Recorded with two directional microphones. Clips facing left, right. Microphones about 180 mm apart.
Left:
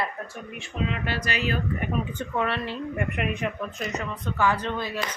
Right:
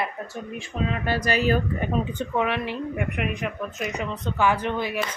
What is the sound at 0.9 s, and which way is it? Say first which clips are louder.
Speech: right 5 dB; 40° right (ahead or behind).